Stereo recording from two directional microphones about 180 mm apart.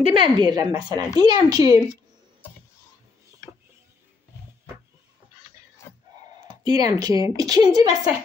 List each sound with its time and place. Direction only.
0.0 s speech: 30° right (ahead or behind)
6.6 s speech: 20° right (ahead or behind)